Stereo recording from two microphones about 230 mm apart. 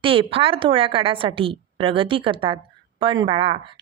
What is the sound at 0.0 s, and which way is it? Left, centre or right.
Speech, right.